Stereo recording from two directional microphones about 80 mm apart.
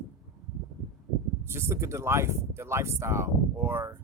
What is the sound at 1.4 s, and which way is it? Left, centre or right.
Speech, right.